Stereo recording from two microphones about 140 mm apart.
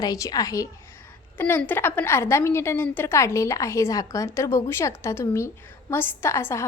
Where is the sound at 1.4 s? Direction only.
15° left (ahead or behind).